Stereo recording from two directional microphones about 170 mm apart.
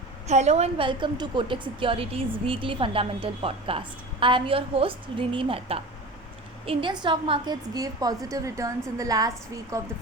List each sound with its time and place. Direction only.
0.3 s a woman's voice: 40° right (ahead or behind); by 9.8 s 20° right (ahead or behind)